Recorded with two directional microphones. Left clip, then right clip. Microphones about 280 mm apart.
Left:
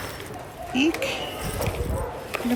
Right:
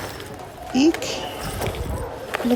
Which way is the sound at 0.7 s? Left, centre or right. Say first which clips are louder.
Right 4 dB; centre.